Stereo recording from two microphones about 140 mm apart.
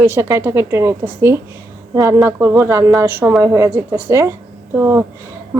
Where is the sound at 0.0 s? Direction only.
15° right (ahead or behind).